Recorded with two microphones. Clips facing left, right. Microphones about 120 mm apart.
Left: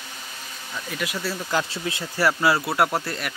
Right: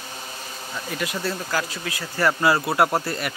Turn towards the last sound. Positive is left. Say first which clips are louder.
# right 2 dB
turn(degrees=0)  # may be behind; listen again after turning